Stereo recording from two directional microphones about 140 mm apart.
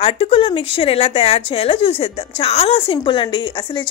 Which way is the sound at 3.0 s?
35° left (ahead or behind).